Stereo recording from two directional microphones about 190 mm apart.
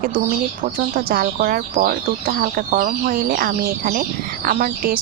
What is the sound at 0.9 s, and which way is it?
Speech, 50° right (ahead or behind).